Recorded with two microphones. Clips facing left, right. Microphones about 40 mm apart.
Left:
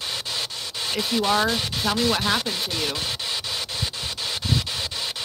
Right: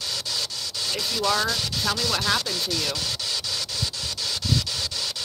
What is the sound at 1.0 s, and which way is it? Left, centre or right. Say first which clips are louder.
Speech: left 3 dB; left.